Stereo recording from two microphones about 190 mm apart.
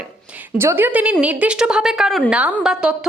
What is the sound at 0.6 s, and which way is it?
A woman's voice, 10° right (ahead or behind).